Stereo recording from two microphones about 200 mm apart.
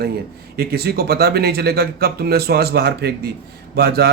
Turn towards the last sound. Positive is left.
turn(degrees=-50)  # may be behind; listen again after turning